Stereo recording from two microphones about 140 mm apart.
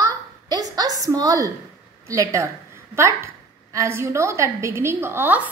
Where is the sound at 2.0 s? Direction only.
20° right (ahead or behind).